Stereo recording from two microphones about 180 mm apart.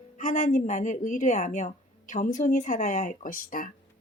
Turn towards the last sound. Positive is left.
turn(degrees=50)  # may be behind; listen again after turning